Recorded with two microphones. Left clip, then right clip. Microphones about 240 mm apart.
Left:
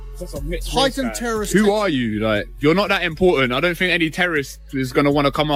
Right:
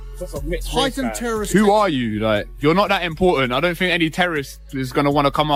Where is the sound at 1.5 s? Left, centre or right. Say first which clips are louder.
Right 3 dB; right.